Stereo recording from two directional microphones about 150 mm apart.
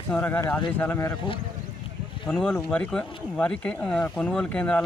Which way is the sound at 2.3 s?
10° left (ahead or behind).